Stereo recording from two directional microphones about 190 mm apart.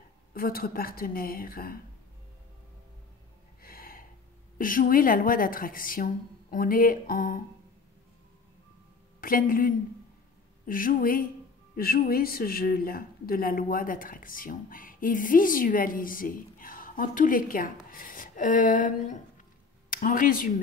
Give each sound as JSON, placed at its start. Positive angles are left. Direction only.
{"t": 0.3, "sound": "a woman's voice", "side_deg": 50}
{"t": 3.6, "sound": "gasp", "side_deg": 50}
{"t": 4.6, "sound": "a woman's voice", "side_deg": 45}
{"t": 9.2, "sound": "a woman's voice", "side_deg": 50}